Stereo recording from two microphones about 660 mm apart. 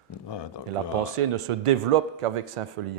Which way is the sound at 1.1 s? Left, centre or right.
Right.